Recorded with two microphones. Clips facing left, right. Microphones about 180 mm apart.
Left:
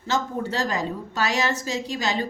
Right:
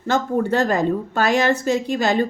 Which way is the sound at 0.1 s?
55° right (ahead or behind).